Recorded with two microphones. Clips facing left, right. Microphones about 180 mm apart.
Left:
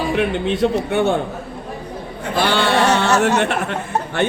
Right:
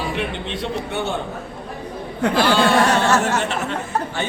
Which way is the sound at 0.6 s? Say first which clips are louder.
Left 7 dB; 55° left (ahead or behind).